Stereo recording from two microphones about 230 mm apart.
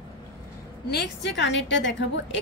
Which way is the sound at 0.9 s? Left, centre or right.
Left.